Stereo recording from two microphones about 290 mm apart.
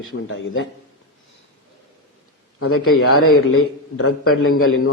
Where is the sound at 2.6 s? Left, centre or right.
Left.